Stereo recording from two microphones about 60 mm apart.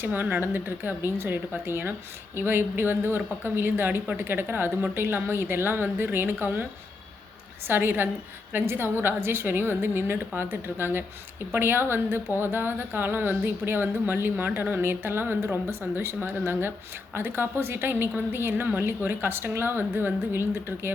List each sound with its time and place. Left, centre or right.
0.0 s speech: right
7.7 s speech: right